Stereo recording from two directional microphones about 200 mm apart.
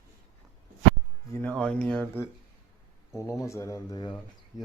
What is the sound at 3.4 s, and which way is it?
Speech, 15° left (ahead or behind).